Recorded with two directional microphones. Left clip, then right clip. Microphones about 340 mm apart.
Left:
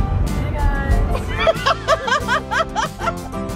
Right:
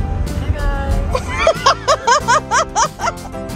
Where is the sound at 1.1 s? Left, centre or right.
Centre.